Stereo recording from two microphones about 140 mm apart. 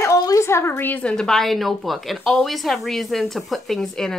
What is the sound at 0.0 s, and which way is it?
Speech, 20° left (ahead or behind).